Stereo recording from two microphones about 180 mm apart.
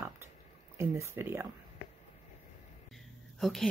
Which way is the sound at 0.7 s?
15° right (ahead or behind).